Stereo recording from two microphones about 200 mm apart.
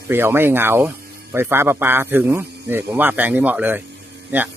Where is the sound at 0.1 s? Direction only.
10° right (ahead or behind).